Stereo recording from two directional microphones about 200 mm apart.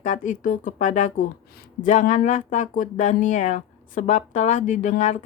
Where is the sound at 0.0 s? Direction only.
40° left (ahead or behind).